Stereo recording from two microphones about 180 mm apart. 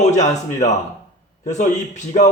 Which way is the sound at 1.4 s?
40° left (ahead or behind).